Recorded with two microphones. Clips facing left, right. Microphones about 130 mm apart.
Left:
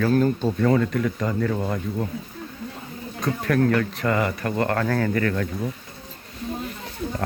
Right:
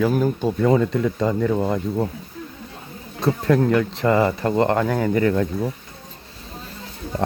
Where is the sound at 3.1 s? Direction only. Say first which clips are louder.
Right 4 dB; 25° right (ahead or behind).